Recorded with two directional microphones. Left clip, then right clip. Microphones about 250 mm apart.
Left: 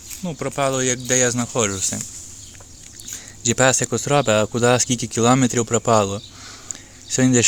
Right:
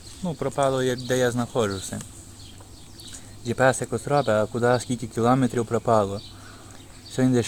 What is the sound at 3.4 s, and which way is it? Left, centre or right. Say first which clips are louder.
Speech: left 4 dB; left.